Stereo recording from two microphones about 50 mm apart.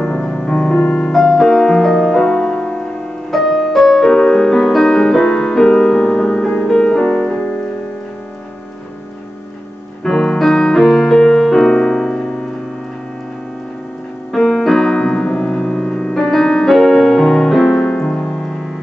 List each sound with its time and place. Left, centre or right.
0.0 s music: left
1.1 s music: centre
3.3 s music: centre
10.0 s music: centre
14.3 s piano: centre
17.9 s music: centre